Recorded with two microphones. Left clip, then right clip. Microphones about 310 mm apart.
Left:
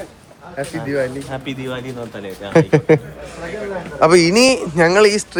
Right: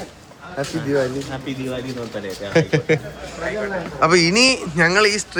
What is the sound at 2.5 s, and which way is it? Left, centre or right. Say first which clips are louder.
Speech: left 5 dB; centre.